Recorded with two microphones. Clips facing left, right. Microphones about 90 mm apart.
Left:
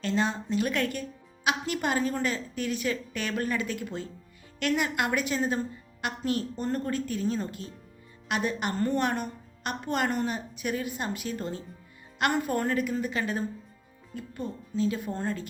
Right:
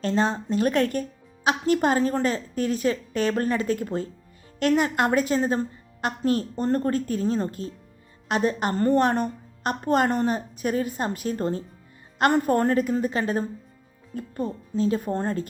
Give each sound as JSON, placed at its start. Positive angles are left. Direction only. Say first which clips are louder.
{"t": 0.0, "sound": "a woman's voice", "louder": "right 4 dB", "side_deg": -40}